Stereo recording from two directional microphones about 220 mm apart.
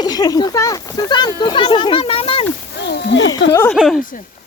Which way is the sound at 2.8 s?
50° left (ahead or behind).